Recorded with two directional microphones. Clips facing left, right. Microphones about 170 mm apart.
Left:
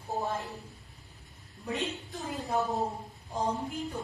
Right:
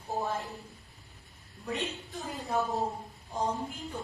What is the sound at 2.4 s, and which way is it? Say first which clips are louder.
Speech: even; 20° left (ahead or behind).